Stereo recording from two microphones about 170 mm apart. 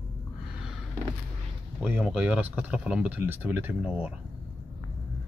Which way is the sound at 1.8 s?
5° right (ahead or behind).